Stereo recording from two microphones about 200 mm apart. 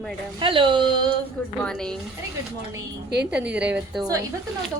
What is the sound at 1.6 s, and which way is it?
Speech, 5° left (ahead or behind).